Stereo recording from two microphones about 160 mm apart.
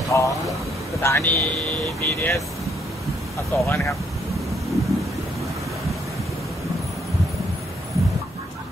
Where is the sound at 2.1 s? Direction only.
20° left (ahead or behind).